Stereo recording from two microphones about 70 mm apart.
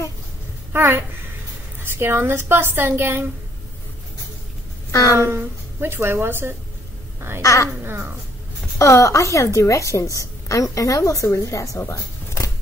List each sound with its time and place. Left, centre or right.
0.7 s a woman's voice: right
5.1 s a woman's voice: right
7.2 s cat: right
7.4 s a woman's voice: left
7.8 s a woman's voice: right
8.7 s a woman's voice: left
11.8 s a sound: left